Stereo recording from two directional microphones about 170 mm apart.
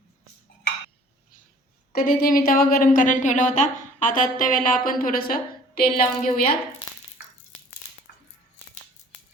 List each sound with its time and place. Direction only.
1.9 s speech: 60° left (ahead or behind)
8.1 s music: 60° left (ahead or behind)